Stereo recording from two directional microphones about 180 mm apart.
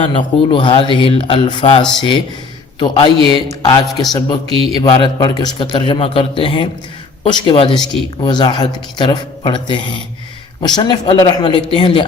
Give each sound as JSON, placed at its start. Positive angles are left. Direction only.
{"t": 0.0, "sound": "a man's voice", "side_deg": 30}
{"t": 3.2, "sound": "speech", "side_deg": -30}
{"t": 3.5, "sound": "a man's voice", "side_deg": 20}
{"t": 4.4, "sound": "a man's voice", "side_deg": -30}
{"t": 4.8, "sound": "a man's voice", "side_deg": 30}